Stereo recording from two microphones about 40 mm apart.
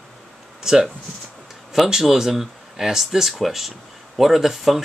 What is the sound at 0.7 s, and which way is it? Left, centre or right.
Speech, centre.